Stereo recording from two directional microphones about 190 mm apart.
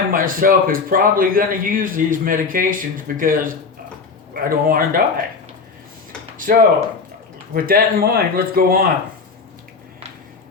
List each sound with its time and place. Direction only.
0.1 s a man's voice: 50° right (ahead or behind)
6.3 s a sound: 45° right (ahead or behind)
7.5 s a man's voice: 50° right (ahead or behind)